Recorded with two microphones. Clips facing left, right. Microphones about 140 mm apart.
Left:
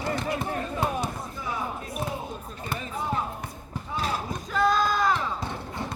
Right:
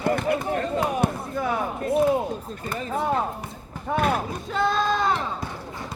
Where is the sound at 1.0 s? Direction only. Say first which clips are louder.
Right 8 dB; 60° right (ahead or behind).